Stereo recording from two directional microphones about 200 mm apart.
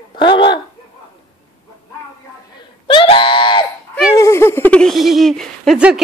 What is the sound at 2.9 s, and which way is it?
Screaming, 25° left (ahead or behind).